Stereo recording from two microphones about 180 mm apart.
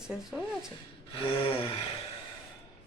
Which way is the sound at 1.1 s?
30° left (ahead or behind).